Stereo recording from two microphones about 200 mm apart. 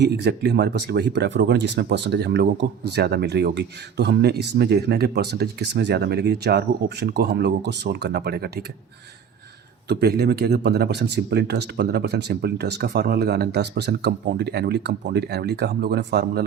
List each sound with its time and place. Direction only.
0.0 s speech: 55° right (ahead or behind)
9.9 s speech: 55° right (ahead or behind)